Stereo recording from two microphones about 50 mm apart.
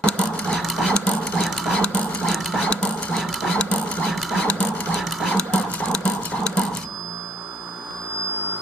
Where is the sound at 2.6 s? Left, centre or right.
Left.